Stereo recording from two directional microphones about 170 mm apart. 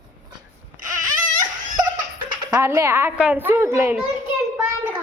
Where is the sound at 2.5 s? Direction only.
15° right (ahead or behind).